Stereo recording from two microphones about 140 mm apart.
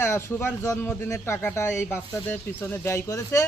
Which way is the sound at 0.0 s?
15° left (ahead or behind).